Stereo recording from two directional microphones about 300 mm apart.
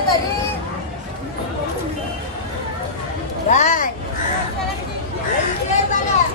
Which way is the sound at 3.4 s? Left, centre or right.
Left.